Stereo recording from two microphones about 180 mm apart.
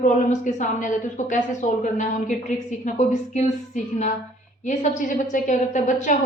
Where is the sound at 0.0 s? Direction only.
45° left (ahead or behind).